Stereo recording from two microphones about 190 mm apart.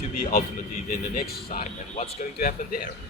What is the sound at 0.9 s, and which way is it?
Speech, 45° left (ahead or behind).